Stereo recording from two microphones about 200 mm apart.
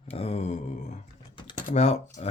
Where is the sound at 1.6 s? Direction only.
35° left (ahead or behind).